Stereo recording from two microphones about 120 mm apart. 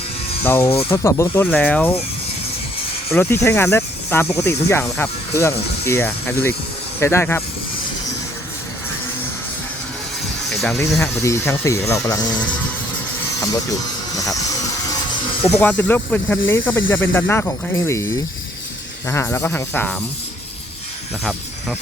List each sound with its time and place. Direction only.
0.4 s speech: 20° left (ahead or behind)
3.2 s speech: 20° left (ahead or behind)
10.5 s music: centre (ahead or behind)
11.0 s speech: 20° left (ahead or behind)
15.4 s speech: 60° left (ahead or behind)
15.6 s speech: 15° left (ahead or behind)